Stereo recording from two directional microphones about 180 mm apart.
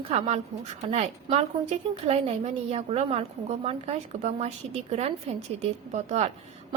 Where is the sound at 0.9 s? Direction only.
35° right (ahead or behind).